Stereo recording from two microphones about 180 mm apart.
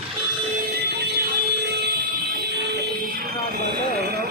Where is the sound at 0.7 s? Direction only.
60° right (ahead or behind).